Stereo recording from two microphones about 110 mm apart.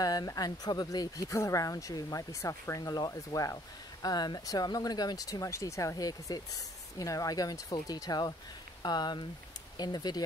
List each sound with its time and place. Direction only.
0.0 s speech: 35° left (ahead or behind)